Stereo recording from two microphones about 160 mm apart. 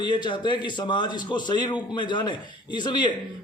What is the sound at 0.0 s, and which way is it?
A man's voice, 30° left (ahead or behind).